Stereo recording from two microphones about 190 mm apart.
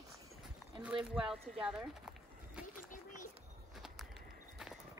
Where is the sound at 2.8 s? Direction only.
45° left (ahead or behind).